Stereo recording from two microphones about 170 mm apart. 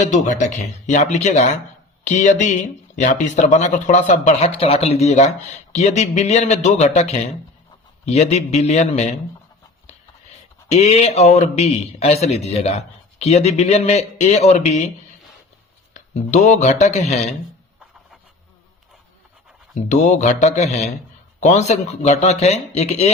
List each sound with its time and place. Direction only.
0.0 s a man's voice: 45° left (ahead or behind)
10.7 s a man's voice: 40° left (ahead or behind)
16.0 s speech: 45° left (ahead or behind)
19.7 s a man's voice: 45° left (ahead or behind)